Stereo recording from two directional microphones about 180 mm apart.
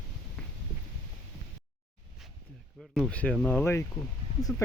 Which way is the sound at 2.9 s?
5° left (ahead or behind).